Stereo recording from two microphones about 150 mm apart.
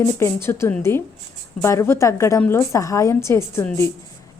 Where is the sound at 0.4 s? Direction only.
15° left (ahead or behind).